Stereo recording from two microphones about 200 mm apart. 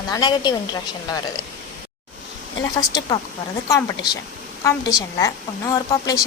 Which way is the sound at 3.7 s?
15° left (ahead or behind).